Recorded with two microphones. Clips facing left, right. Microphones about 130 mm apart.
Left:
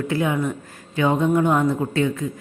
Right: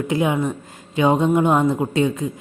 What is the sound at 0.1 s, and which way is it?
A woman's voice, 20° right (ahead or behind).